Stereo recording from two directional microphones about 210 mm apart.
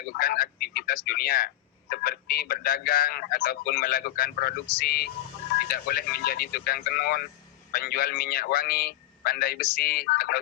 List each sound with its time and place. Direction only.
0.2 s a man's voice: 45° left (ahead or behind)